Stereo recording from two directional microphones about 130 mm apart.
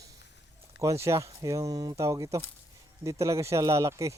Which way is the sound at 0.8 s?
25° right (ahead or behind).